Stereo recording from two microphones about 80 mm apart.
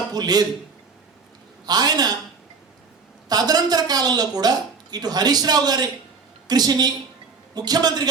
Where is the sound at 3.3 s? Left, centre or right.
Right.